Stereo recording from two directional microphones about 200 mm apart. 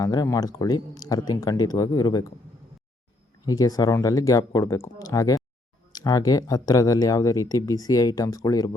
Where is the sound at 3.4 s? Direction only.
20° left (ahead or behind).